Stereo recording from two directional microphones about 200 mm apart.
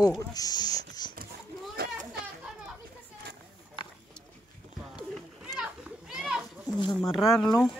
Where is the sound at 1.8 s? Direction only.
50° right (ahead or behind).